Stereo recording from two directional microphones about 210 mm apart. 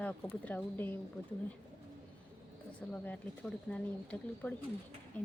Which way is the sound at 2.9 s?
5° left (ahead or behind).